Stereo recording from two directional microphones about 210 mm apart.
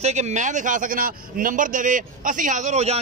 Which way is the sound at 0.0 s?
30° right (ahead or behind).